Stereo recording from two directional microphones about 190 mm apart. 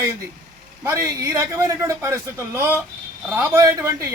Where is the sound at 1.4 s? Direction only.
15° right (ahead or behind).